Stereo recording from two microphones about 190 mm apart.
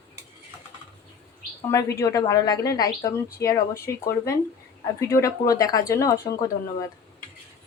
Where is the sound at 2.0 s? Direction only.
15° left (ahead or behind).